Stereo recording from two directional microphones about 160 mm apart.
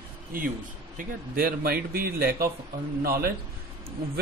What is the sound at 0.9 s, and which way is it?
Speech, 65° right (ahead or behind).